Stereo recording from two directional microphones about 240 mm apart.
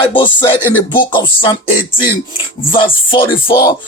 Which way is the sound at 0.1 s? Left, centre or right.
Centre.